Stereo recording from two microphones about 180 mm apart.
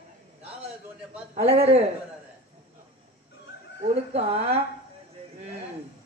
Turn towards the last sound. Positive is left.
turn(degrees=-35)  # may be behind; listen again after turning